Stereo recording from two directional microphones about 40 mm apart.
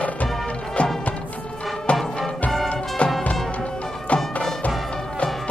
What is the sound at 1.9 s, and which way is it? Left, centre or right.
Music, left.